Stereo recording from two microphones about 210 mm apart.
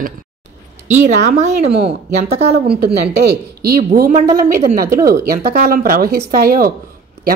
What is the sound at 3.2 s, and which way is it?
Speech, 45° right (ahead or behind).